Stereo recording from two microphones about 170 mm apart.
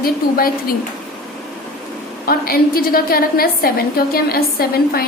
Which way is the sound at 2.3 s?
60° left (ahead or behind).